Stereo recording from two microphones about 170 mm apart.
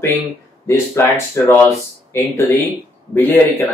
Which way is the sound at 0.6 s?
15° left (ahead or behind).